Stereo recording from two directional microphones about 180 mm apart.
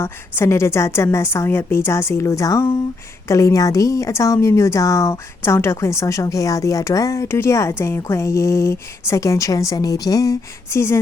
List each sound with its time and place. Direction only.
0.0 s a woman's voice: 15° left (ahead or behind)